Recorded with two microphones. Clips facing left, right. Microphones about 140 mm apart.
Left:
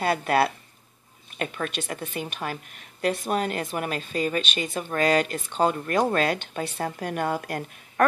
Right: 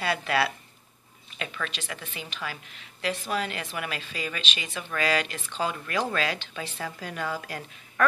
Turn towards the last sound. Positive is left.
turn(degrees=55)  # may be behind; listen again after turning